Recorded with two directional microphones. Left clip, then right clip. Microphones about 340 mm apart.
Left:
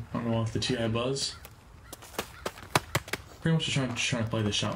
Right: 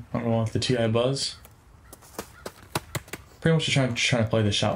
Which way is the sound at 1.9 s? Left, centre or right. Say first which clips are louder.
Left 2 dB; centre.